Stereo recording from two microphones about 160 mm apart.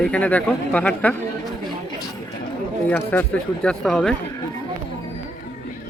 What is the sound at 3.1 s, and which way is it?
Speech, 10° left (ahead or behind).